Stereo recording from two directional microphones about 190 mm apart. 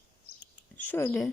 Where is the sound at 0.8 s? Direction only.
10° left (ahead or behind).